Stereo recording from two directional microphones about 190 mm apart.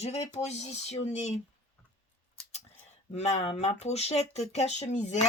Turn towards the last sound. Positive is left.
turn(degrees=40)  # may be behind; listen again after turning